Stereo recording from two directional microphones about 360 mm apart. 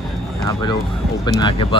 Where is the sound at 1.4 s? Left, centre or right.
Centre.